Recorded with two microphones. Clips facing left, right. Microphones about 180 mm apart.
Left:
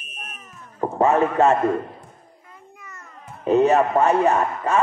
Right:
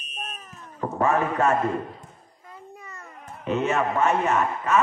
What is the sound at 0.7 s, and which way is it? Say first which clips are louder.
Speech: left 5 dB; 30° left (ahead or behind).